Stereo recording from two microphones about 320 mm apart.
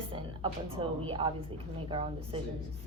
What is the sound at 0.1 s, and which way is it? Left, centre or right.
A woman's voice, centre.